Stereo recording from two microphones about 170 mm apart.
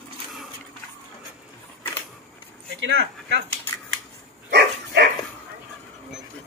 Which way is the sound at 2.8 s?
90° right.